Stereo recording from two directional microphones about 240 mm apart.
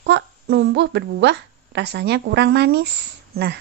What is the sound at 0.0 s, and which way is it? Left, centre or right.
A woman's voice, right.